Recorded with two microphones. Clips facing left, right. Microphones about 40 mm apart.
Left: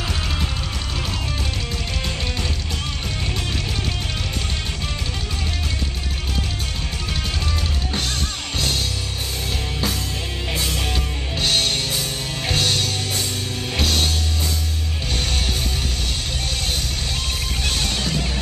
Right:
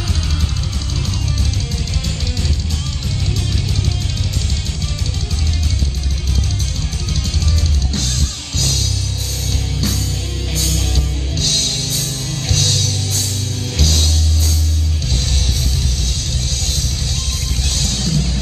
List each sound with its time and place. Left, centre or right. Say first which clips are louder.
8.5 s music: right 2 dB; centre
10.5 s music: right 1 dB; centre
17.6 s music: right 2 dB; centre